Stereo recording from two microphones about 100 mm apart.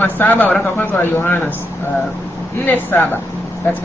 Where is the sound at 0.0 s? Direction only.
15° left (ahead or behind).